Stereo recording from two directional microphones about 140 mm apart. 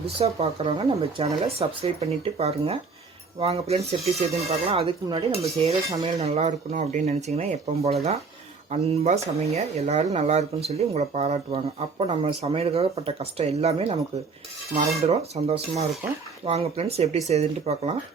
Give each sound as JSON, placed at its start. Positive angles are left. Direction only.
{"t": 0.2, "sound": "speech", "side_deg": -45}
{"t": 15.0, "sound": "speech", "side_deg": -45}